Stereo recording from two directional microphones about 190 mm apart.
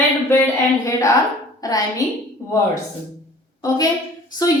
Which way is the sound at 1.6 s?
20° left (ahead or behind).